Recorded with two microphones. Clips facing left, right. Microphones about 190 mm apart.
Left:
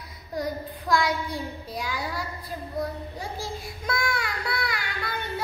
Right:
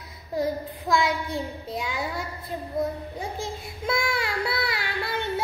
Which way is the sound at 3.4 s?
25° right (ahead or behind).